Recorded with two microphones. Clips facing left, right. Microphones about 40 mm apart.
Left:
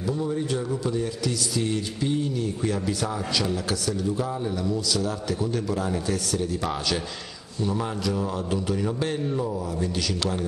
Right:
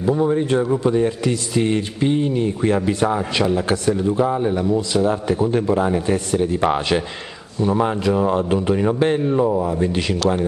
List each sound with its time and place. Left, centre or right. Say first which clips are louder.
0.0 s a man's voice: right 9 dB; right